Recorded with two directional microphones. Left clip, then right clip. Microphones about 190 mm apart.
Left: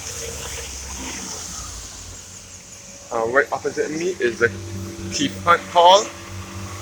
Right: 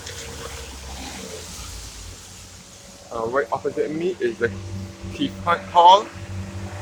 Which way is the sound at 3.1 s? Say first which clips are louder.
Left 4 dB; 5° left (ahead or behind).